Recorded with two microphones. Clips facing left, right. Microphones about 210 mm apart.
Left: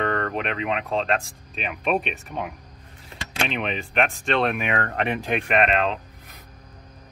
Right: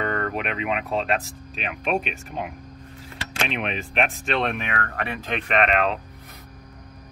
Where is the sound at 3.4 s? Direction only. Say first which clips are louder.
Even; centre (ahead or behind).